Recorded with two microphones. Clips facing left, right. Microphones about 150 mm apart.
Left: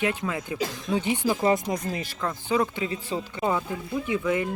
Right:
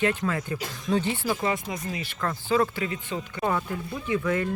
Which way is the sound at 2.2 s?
15° left (ahead or behind).